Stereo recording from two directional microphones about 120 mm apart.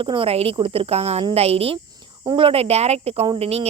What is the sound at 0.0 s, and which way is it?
Speech, 45° right (ahead or behind).